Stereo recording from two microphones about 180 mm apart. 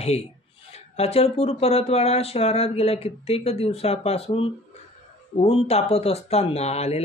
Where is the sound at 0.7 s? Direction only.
35° left (ahead or behind).